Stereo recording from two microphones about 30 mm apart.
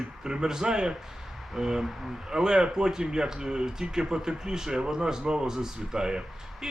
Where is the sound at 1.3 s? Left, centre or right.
Centre.